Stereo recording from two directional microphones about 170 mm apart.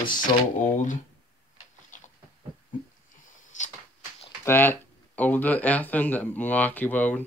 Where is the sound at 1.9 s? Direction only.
50° left (ahead or behind).